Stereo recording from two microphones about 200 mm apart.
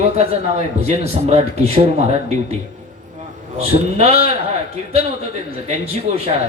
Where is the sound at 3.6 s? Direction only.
30° right (ahead or behind).